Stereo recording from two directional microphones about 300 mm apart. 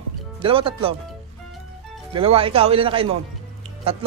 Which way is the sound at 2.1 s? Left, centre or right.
Centre.